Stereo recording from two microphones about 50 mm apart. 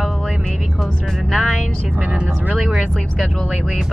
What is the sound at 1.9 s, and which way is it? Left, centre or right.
Speech, right.